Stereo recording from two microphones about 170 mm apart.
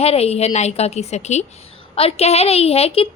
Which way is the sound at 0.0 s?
35° left (ahead or behind).